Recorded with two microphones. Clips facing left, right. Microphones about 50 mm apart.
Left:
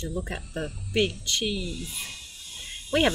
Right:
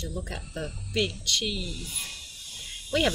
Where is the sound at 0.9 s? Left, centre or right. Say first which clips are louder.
Left 3 dB; left.